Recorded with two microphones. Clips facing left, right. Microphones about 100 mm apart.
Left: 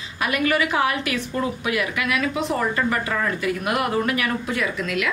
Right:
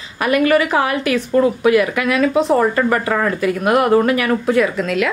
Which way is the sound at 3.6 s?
45° right (ahead or behind).